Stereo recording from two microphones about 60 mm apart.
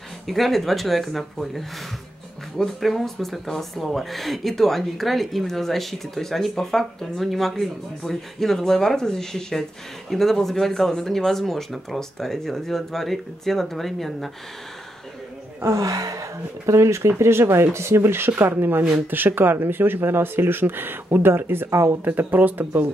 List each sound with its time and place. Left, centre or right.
0.3 s speech: centre
15.8 s speech: right
21.6 s speech: right
22.0 s speech: right